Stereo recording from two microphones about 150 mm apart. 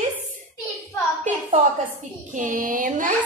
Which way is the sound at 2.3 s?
60° right (ahead or behind).